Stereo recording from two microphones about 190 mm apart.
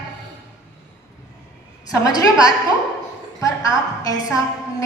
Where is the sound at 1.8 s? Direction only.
20° left (ahead or behind).